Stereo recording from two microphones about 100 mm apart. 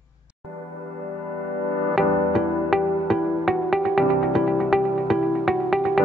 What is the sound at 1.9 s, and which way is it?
Music, centre (ahead or behind).